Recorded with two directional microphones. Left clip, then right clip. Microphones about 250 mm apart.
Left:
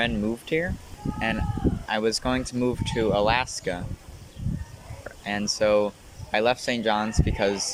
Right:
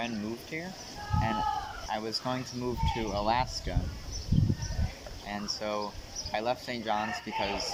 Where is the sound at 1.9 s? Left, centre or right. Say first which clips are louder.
Left 9 dB; left.